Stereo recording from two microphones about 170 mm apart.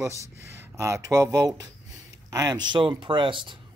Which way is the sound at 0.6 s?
15° right (ahead or behind).